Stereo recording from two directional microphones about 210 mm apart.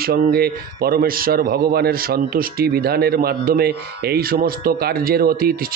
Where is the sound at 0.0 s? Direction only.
50° right (ahead or behind).